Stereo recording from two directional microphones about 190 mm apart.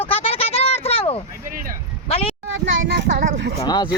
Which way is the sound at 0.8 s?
30° left (ahead or behind).